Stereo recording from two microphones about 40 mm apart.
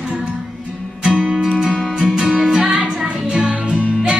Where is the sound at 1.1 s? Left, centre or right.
Right.